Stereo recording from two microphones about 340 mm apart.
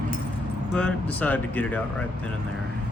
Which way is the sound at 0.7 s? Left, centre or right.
Centre.